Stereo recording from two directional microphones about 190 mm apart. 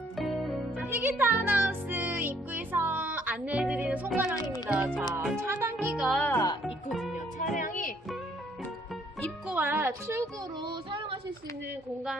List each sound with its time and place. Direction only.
0.2 s music: centre (ahead or behind)
0.9 s music: 10° right (ahead or behind)
4.4 s music: 20° left (ahead or behind)
4.7 s music: 10° right (ahead or behind)
5.8 s music: centre (ahead or behind)
6.7 s music: centre (ahead or behind)
7.3 s music: 45° left (ahead or behind)
9.5 s music: 10° right (ahead or behind)
10.6 s child singing: 25° right (ahead or behind)